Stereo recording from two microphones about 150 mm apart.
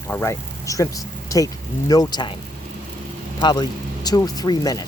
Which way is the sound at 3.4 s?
30° left (ahead or behind).